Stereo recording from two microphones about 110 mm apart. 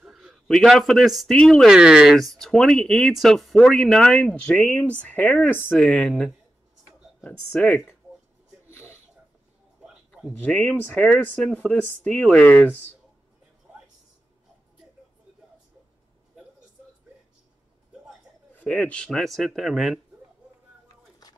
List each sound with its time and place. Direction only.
0.0 s speech: 5° right (ahead or behind)
8.6 s a sound: 25° left (ahead or behind)
10.4 s speech: 10° left (ahead or behind)
18.5 s speech: 15° left (ahead or behind)